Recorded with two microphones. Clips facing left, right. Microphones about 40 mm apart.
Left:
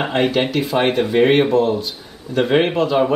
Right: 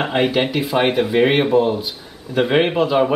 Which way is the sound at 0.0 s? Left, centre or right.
Centre.